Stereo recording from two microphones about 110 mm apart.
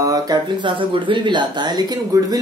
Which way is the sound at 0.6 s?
50° right (ahead or behind).